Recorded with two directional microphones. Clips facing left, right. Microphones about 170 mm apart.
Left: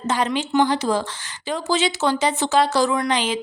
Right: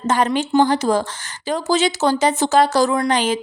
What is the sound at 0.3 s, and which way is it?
A woman's voice, 45° right (ahead or behind).